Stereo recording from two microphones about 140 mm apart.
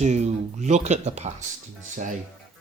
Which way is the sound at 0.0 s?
55° right (ahead or behind).